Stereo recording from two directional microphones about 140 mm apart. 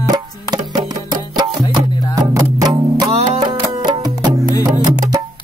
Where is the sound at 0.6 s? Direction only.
60° right (ahead or behind).